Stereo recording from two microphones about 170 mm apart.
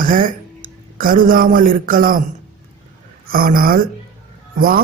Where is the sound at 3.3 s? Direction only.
60° right (ahead or behind).